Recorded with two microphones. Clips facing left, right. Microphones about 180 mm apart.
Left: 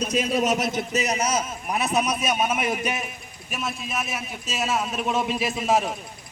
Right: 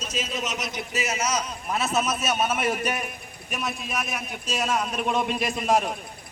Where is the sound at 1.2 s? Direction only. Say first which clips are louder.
Left 2 dB; 25° left (ahead or behind).